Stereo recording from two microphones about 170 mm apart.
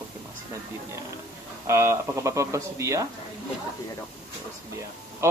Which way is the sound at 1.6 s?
15° right (ahead or behind).